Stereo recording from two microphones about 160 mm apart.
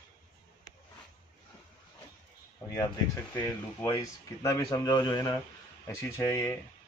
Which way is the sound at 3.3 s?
20° left (ahead or behind).